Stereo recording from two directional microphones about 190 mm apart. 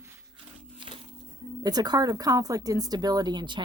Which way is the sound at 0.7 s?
25° right (ahead or behind).